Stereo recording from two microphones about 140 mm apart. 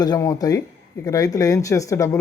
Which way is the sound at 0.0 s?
25° left (ahead or behind).